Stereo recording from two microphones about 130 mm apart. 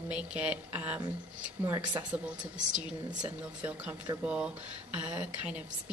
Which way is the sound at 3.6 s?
10° right (ahead or behind).